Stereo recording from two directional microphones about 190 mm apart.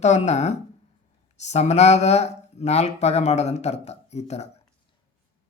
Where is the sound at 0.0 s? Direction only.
35° left (ahead or behind).